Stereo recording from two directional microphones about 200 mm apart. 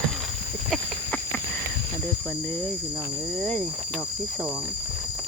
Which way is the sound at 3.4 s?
5° left (ahead or behind).